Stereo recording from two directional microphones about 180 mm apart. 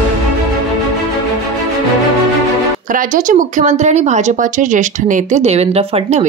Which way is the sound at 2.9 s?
50° right (ahead or behind).